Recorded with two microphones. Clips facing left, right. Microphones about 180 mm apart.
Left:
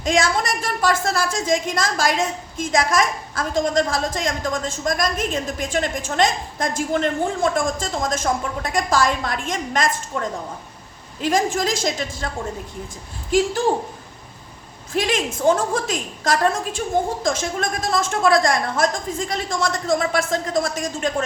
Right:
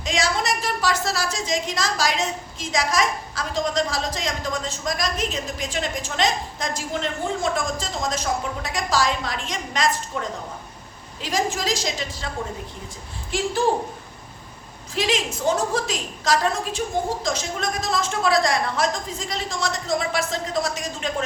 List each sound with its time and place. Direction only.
0.0 s a woman's voice: 50° left (ahead or behind)
11.2 s a woman's voice: 50° left (ahead or behind)
14.9 s a woman's voice: 50° left (ahead or behind)